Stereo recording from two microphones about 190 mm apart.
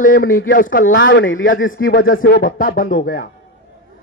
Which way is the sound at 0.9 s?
70° left (ahead or behind).